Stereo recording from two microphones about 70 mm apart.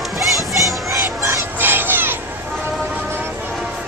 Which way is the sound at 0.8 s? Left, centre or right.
Right.